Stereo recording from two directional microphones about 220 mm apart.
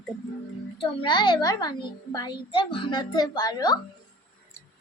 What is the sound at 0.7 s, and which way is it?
A child's voice, 25° left (ahead or behind).